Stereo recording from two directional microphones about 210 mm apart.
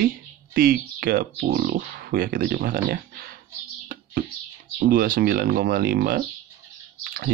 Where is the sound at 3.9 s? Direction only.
40° right (ahead or behind).